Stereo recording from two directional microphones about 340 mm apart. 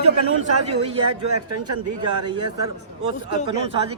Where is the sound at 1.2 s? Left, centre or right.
Right.